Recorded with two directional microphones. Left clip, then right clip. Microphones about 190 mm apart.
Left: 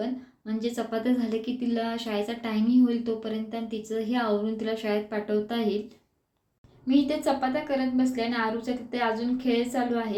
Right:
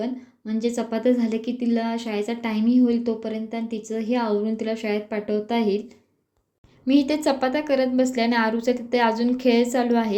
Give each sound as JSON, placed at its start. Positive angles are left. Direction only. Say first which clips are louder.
{"t": 0.0, "sound": "a woman's voice", "louder": "right 3 dB", "side_deg": -30}
{"t": 6.8, "sound": "a woman's voice", "louder": "right 4 dB", "side_deg": -45}